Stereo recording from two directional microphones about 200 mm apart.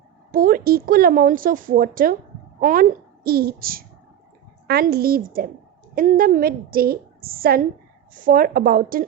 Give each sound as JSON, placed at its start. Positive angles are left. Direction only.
{"t": 0.3, "sound": "a woman's voice", "side_deg": -45}